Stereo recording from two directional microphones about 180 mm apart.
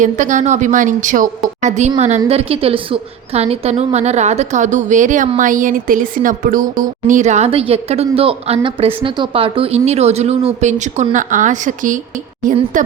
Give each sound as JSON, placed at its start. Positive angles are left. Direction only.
{"t": 0.0, "sound": "a woman's voice", "side_deg": -45}